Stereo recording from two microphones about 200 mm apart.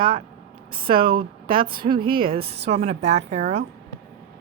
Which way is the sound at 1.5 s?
25° right (ahead or behind).